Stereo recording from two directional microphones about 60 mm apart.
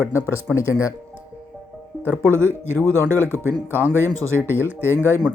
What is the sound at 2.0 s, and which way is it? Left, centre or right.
Speech, right.